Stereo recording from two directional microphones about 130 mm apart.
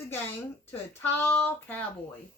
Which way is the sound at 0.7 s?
15° left (ahead or behind).